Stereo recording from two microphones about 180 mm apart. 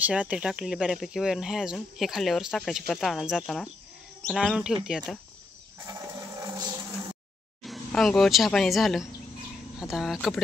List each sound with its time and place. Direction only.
0.0 s speech: 5° right (ahead or behind)
5.8 s a sound: 20° right (ahead or behind)
7.6 s speech: centre (ahead or behind)